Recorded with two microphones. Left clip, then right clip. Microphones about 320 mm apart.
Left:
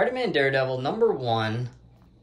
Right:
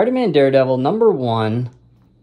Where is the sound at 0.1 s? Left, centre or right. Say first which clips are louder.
Right 9 dB; centre.